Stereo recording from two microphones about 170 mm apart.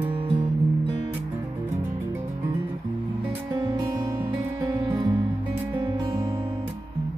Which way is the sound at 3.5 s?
20° right (ahead or behind).